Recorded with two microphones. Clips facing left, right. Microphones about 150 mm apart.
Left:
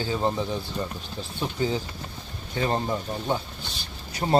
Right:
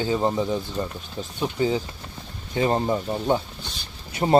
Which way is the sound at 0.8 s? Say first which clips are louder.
Right 3 dB; 20° right (ahead or behind).